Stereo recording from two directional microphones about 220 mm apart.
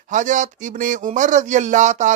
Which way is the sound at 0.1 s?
35° right (ahead or behind).